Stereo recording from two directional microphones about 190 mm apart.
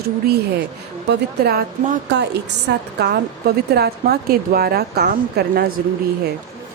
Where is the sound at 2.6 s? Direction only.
60° right (ahead or behind).